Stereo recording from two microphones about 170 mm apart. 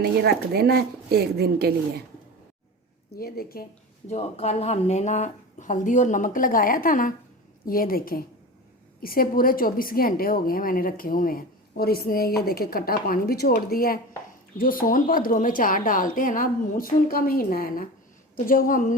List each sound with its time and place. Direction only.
0.0 s a woman's voice: 70° right (ahead or behind)
3.2 s a woman's voice: 60° left (ahead or behind)
4.1 s a woman's voice: 40° left (ahead or behind)